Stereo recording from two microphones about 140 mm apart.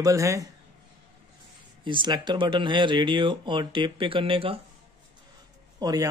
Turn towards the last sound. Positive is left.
turn(degrees=-25)  # may be behind; listen again after turning